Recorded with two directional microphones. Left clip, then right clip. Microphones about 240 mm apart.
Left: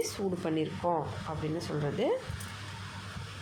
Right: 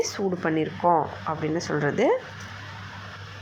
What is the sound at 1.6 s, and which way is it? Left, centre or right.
Speech, centre.